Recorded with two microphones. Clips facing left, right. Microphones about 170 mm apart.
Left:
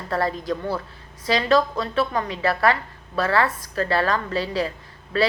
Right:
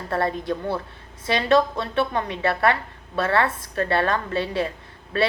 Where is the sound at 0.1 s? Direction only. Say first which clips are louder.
Even; 25° right (ahead or behind).